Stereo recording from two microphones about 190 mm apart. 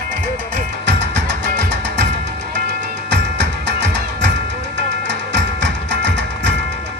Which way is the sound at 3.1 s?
65° right (ahead or behind).